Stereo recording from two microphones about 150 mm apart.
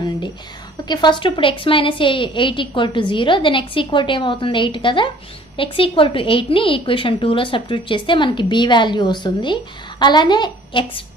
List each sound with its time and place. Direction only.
0.8 s speech: 30° left (ahead or behind)